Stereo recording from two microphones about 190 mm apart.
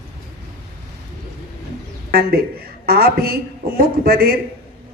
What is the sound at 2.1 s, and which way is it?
A woman's voice, 55° right (ahead or behind).